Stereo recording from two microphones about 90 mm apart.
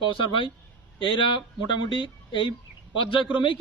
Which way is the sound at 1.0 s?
55° left (ahead or behind).